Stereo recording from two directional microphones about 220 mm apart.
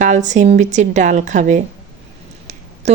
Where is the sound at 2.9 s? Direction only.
30° right (ahead or behind).